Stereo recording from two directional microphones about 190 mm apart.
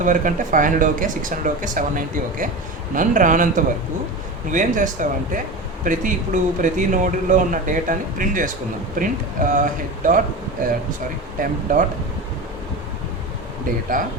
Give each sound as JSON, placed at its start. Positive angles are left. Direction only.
{"t": 0.0, "sound": "speech", "side_deg": -45}
{"t": 11.7, "sound": "speech", "side_deg": -45}
{"t": 13.9, "sound": "speech", "side_deg": -45}